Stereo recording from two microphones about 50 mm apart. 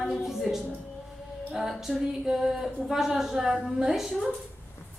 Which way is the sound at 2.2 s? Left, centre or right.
Centre.